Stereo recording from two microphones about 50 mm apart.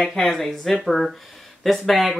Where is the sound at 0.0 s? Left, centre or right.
Centre.